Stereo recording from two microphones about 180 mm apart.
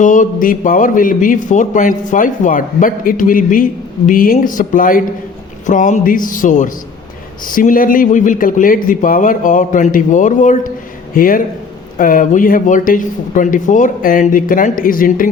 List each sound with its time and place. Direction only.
0.0 s a man's voice: 45° left (ahead or behind)